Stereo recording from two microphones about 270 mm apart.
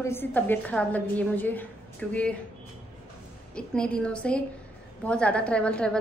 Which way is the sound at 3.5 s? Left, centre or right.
Centre.